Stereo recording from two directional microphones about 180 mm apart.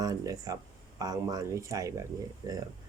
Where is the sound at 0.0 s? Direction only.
20° right (ahead or behind).